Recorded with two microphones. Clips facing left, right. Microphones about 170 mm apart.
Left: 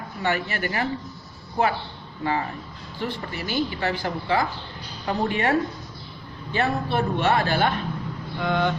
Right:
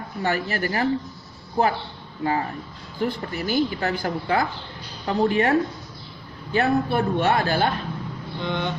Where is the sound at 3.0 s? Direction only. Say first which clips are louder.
Right 4 dB; 45° right (ahead or behind).